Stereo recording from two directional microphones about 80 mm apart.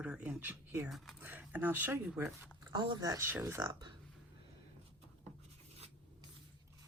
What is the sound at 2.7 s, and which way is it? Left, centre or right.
Speech, right.